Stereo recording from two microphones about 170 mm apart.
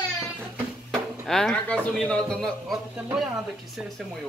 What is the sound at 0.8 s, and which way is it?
Speech, centre (ahead or behind).